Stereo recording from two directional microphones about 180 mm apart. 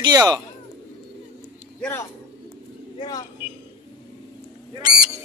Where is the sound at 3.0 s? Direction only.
20° left (ahead or behind).